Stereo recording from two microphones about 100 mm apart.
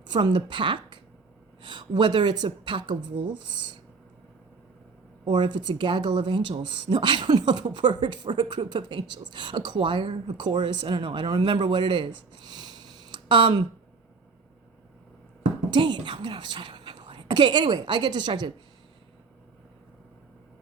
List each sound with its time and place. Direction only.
0.1 s speech: 50° right (ahead or behind)
5.2 s speech: 50° right (ahead or behind)
15.7 s a woman's voice: 55° right (ahead or behind)